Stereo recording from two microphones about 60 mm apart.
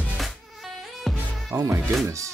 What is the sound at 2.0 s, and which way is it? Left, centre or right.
Speech, right.